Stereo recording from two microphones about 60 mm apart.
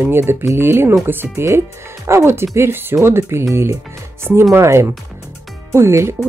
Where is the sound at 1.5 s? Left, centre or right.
Right.